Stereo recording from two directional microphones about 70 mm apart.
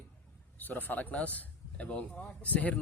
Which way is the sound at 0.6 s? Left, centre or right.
Left.